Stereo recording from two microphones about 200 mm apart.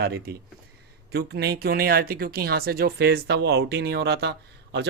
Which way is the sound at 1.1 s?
55° right (ahead or behind).